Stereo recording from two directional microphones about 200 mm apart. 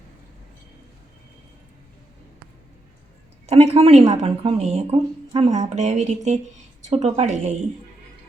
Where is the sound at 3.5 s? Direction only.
30° right (ahead or behind).